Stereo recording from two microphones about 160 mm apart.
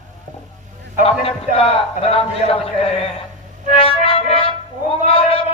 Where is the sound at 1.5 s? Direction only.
40° left (ahead or behind).